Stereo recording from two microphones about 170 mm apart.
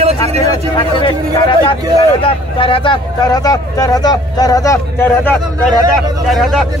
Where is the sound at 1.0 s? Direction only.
30° left (ahead or behind); by 5.4 s 10° left (ahead or behind).